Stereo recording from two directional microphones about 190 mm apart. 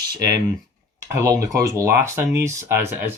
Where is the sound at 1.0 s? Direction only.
15° right (ahead or behind).